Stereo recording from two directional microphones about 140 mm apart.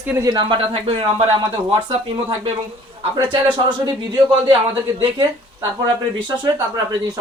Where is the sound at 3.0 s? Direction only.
35° right (ahead or behind).